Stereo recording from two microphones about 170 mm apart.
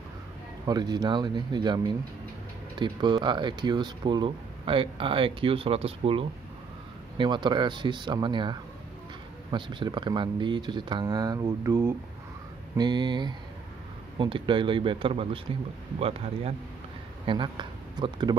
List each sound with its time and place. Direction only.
0.7 s speech: 25° right (ahead or behind)